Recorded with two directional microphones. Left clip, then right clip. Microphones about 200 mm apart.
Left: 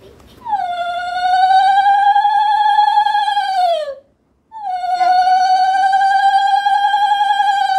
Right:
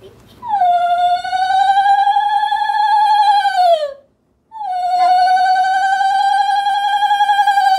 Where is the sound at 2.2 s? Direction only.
25° right (ahead or behind).